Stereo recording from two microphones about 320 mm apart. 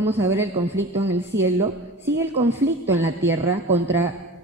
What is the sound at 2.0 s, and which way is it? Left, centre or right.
A woman's voice, centre.